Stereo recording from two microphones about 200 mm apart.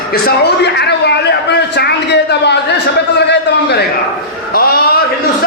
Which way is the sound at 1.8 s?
55° left (ahead or behind).